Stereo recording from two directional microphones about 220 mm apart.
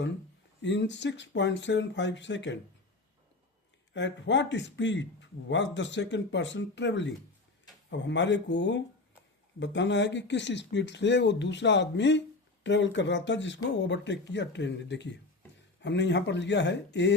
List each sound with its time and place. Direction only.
0.6 s speech: 55° left (ahead or behind)
3.9 s a man's voice: 55° left (ahead or behind)